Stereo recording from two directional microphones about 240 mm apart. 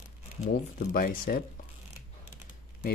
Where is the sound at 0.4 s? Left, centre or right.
Left.